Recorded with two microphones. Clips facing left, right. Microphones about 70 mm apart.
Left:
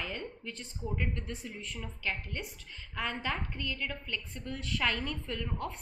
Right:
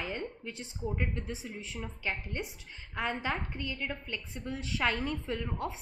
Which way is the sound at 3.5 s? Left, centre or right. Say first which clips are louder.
Right 1 dB; centre.